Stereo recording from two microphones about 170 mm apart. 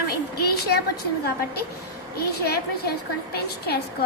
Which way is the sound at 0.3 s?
70° left (ahead or behind).